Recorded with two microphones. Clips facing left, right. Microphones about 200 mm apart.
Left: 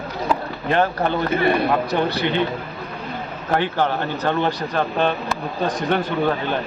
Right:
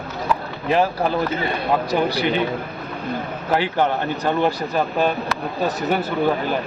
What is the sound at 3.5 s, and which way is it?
Speech, 10° right (ahead or behind).